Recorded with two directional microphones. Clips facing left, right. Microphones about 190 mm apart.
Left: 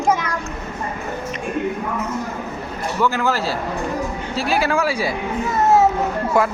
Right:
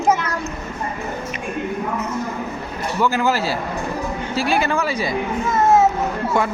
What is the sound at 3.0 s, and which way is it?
Speech, centre (ahead or behind).